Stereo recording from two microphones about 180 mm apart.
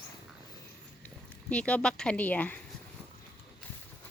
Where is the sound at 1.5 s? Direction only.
5° left (ahead or behind).